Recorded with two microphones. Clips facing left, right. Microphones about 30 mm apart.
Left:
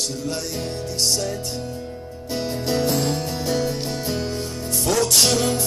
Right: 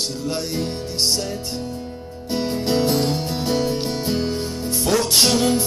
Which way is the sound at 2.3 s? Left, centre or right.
Centre.